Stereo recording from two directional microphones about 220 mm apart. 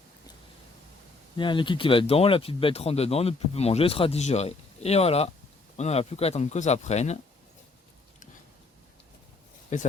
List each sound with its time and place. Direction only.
1.4 s speech: 20° left (ahead or behind)
9.7 s speech: 35° left (ahead or behind)